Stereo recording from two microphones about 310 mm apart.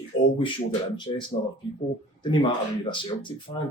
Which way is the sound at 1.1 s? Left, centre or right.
Centre.